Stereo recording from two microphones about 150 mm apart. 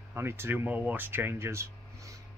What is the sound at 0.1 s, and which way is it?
Speech, 15° right (ahead or behind).